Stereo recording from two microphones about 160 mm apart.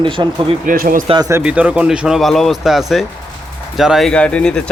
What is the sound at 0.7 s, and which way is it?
Speech, 60° right (ahead or behind).